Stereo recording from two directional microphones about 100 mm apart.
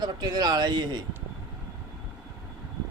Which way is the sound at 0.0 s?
45° right (ahead or behind).